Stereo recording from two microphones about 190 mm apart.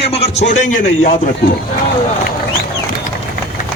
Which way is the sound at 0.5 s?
45° left (ahead or behind).